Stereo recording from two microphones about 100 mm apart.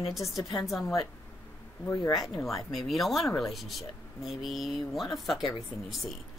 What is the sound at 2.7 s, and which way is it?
Speech, centre (ahead or behind).